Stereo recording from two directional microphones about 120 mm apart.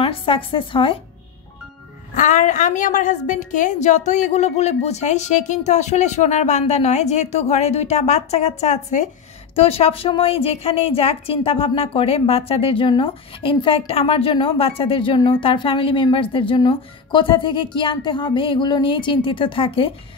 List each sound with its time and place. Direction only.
0.0 s a woman's voice: 50° left (ahead or behind)
2.1 s a woman's voice: 90° left
9.6 s a woman's voice: 55° left (ahead or behind)